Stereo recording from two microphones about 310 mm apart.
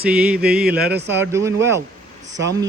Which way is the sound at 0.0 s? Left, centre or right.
Centre.